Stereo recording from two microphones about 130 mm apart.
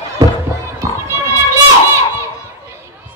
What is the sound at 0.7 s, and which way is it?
Music, 20° right (ahead or behind).